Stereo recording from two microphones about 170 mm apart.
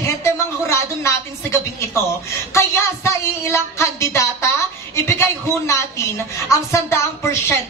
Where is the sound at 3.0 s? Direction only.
15° left (ahead or behind).